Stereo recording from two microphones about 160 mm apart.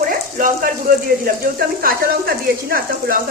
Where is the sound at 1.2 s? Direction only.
70° right (ahead or behind).